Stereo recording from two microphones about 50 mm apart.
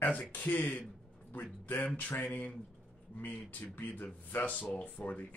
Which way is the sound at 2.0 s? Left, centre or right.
Left.